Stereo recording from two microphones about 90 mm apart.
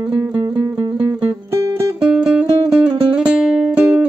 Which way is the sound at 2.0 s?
10° right (ahead or behind).